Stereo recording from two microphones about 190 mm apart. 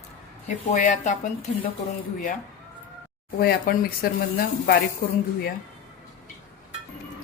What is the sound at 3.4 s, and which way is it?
Speech, 55° left (ahead or behind).